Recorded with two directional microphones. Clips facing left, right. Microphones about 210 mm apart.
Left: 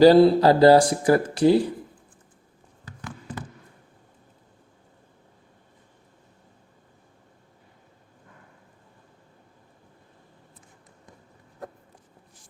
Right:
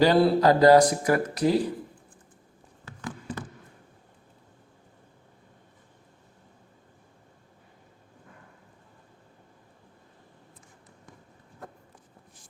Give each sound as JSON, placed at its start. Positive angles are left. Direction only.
{"t": 0.0, "sound": "speech", "side_deg": 35}